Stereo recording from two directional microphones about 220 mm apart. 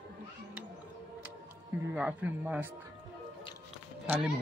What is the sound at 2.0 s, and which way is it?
Speech, 5° right (ahead or behind).